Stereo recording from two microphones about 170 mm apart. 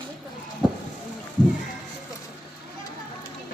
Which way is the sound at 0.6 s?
Centre (ahead or behind).